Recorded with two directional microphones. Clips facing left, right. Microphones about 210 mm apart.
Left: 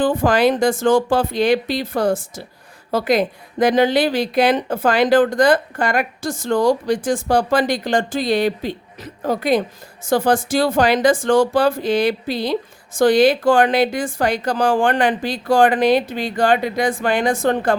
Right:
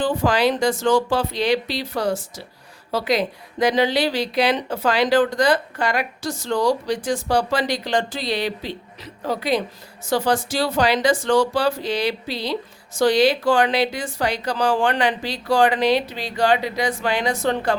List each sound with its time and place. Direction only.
0.0 s speech: 50° left (ahead or behind)